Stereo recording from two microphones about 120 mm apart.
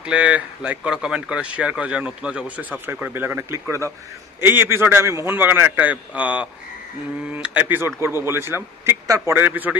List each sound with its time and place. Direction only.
0.0 s a man's voice: 10° right (ahead or behind); by 9.3 s 25° right (ahead or behind)
9.3 s speech: 15° right (ahead or behind)